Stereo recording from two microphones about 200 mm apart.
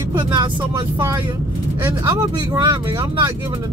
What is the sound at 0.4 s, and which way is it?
Speech, 20° right (ahead or behind).